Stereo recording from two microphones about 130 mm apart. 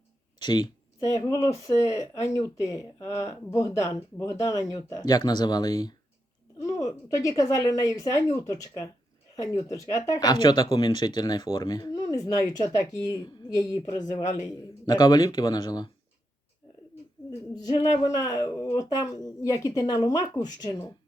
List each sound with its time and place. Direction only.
0.3 s speech: 35° left (ahead or behind)
17.5 s speech: 30° left (ahead or behind)